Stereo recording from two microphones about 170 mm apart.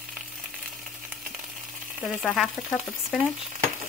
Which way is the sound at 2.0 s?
5° left (ahead or behind).